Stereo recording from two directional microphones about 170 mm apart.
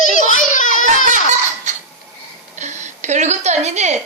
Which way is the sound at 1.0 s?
45° right (ahead or behind).